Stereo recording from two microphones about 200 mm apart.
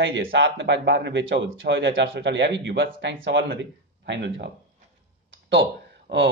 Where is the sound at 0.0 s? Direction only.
65° right (ahead or behind).